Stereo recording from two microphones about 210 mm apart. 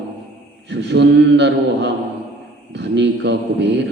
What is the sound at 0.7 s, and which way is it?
A man's voice, 55° right (ahead or behind).